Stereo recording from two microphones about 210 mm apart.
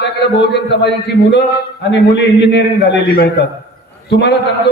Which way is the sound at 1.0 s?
55° left (ahead or behind).